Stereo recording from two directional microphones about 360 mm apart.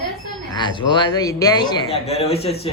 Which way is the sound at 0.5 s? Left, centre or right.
Centre.